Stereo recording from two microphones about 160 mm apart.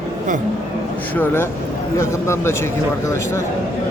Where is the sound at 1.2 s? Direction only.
15° left (ahead or behind).